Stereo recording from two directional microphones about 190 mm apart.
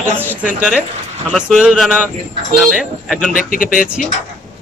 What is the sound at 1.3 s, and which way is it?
Speech, centre (ahead or behind).